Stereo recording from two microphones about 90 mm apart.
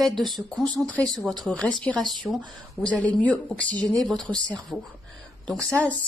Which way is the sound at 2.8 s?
15° left (ahead or behind).